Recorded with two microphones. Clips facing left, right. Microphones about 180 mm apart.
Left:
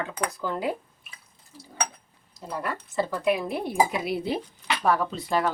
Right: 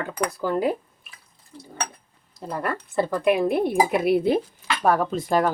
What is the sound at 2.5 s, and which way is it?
A woman's voice, 55° right (ahead or behind).